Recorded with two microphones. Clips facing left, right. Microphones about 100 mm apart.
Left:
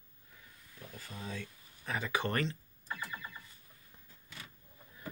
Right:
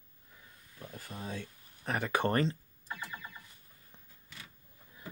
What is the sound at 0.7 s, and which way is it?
Speech, 45° right (ahead or behind).